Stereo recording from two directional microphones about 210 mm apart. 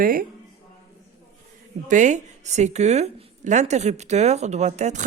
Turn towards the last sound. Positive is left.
turn(degrees=-35)  # may be behind; listen again after turning